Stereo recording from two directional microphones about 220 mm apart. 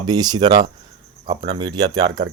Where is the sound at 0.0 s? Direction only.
20° right (ahead or behind).